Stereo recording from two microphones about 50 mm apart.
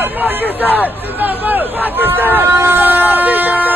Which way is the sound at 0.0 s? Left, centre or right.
Right.